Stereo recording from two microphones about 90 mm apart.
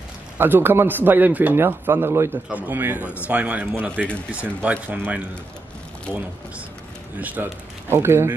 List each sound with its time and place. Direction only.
0.4 s a man's voice: 25° right (ahead or behind)
7.2 s a man's voice: 15° right (ahead or behind)